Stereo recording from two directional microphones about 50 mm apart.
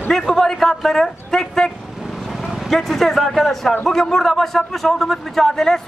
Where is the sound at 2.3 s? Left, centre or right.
Centre.